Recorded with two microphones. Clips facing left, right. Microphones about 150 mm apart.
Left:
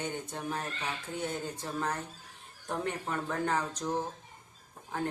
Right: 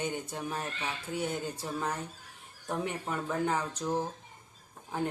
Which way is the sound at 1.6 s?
10° right (ahead or behind).